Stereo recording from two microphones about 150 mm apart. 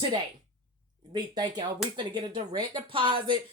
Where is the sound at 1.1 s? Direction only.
30° right (ahead or behind).